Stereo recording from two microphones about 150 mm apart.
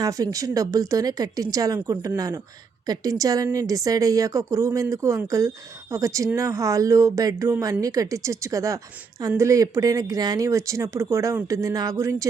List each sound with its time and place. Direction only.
0.0 s speech: 25° right (ahead or behind)